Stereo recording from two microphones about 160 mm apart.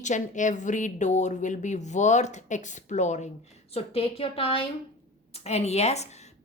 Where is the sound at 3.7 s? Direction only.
35° left (ahead or behind).